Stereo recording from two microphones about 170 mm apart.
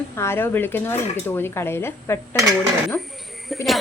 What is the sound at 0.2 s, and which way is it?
Speech, 15° left (ahead or behind).